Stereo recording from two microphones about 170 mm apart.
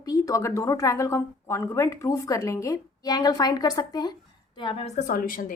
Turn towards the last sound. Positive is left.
turn(degrees=55)  # may be behind; listen again after turning